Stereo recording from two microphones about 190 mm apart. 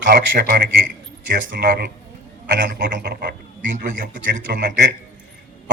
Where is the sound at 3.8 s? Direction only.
45° right (ahead or behind).